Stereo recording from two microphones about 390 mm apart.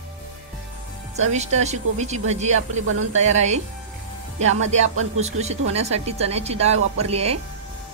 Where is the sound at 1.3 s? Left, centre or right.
Centre.